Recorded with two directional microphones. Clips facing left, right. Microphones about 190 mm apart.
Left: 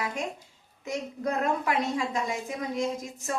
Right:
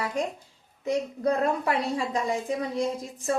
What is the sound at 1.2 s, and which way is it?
A woman's voice, 35° right (ahead or behind).